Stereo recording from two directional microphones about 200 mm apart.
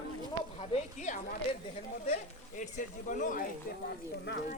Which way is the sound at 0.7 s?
35° left (ahead or behind).